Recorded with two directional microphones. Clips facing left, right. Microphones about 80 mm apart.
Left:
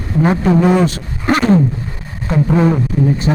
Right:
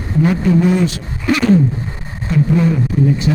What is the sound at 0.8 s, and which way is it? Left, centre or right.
Speech, left.